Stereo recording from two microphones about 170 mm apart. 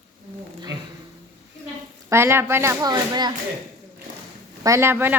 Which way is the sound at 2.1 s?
15° right (ahead or behind).